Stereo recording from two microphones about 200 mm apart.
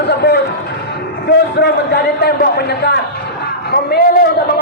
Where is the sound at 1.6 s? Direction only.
55° left (ahead or behind).